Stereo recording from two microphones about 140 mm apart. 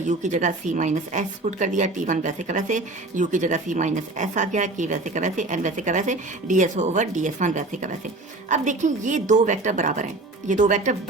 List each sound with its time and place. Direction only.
0.1 s a woman's voice: 60° right (ahead or behind)